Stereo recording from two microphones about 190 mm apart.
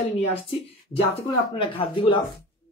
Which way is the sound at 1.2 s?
25° left (ahead or behind).